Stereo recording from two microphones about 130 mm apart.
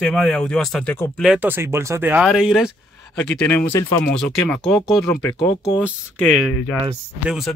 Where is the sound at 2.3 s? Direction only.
Centre (ahead or behind); by 3.9 s 20° left (ahead or behind).